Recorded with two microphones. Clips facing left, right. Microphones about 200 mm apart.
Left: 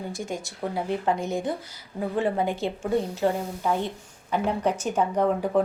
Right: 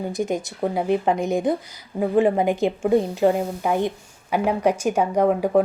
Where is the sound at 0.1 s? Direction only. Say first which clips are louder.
Right 8 dB; 20° right (ahead or behind).